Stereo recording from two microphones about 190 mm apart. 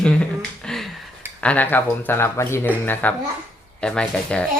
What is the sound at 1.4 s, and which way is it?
Speech, 10° left (ahead or behind).